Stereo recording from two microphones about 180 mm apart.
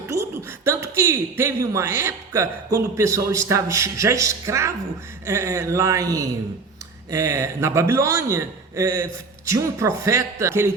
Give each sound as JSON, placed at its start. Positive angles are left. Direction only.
{"t": 0.1, "sound": "a man's voice", "side_deg": -15}